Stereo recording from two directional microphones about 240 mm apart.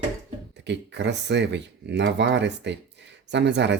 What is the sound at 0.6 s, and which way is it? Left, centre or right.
Speech, right.